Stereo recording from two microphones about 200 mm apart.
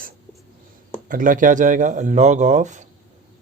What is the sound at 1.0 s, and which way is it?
Speech, 40° right (ahead or behind).